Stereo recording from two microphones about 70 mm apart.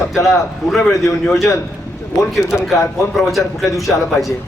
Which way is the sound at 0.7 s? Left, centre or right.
Centre.